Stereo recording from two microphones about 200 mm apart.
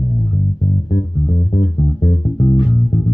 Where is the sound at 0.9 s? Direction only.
30° left (ahead or behind).